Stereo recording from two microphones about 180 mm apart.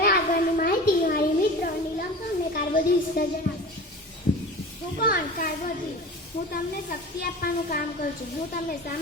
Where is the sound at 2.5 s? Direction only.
55° left (ahead or behind).